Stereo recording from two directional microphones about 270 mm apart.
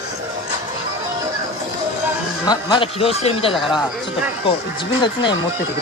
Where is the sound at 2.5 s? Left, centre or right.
Centre.